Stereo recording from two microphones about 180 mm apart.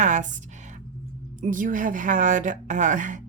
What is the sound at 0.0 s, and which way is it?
Speech, 45° right (ahead or behind).